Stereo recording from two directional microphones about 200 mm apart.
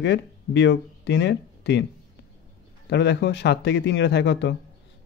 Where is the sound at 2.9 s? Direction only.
60° left (ahead or behind).